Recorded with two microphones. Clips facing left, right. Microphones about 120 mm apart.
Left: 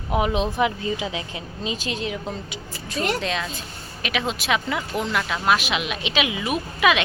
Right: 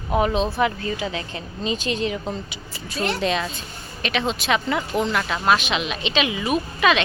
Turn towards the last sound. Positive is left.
turn(degrees=10)  # may be behind; listen again after turning